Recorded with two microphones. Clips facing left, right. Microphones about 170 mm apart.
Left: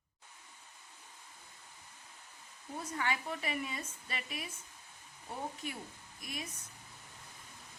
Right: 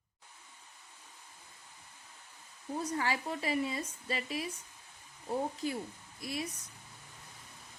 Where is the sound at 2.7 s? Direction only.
35° right (ahead or behind).